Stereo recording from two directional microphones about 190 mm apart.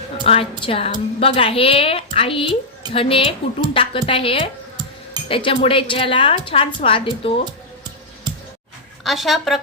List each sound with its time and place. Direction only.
0.3 s a woman's voice: 30° left (ahead or behind)
9.0 s a woman's voice: centre (ahead or behind)